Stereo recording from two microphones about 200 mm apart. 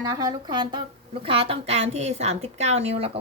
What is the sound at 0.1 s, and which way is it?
Speech, 20° right (ahead or behind).